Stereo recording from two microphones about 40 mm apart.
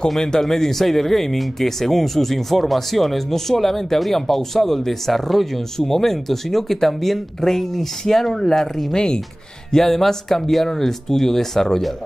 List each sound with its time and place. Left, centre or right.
0.2 s speech: centre
9.7 s speech: centre